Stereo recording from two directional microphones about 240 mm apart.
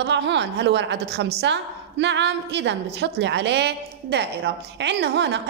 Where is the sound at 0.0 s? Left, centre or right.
Right.